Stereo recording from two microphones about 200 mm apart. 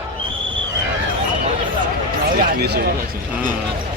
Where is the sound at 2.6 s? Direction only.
50° right (ahead or behind).